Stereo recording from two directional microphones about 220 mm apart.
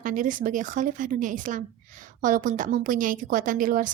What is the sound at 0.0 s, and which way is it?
A woman's voice, 35° right (ahead or behind).